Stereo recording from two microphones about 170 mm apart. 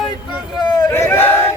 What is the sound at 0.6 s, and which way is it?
Crowd, 20° left (ahead or behind).